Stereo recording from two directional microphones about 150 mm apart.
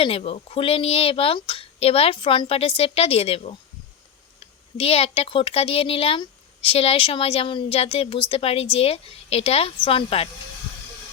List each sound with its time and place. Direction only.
0.0 s speech: 40° left (ahead or behind)
4.8 s speech: 40° left (ahead or behind)